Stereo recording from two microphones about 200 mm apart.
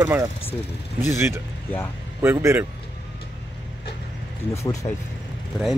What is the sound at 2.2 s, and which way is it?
Speech, 10° right (ahead or behind).